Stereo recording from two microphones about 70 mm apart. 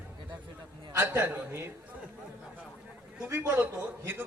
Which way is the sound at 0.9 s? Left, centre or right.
Right.